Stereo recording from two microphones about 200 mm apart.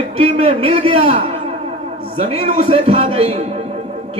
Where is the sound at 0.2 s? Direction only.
30° right (ahead or behind).